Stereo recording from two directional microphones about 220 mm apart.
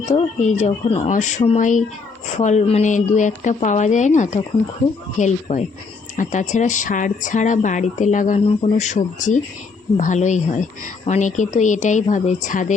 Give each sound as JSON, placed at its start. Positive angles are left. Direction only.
{"t": 0.1, "sound": "speech", "side_deg": 30}